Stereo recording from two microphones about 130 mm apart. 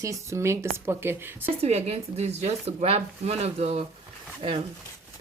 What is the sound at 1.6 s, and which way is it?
A woman's voice, 55° right (ahead or behind).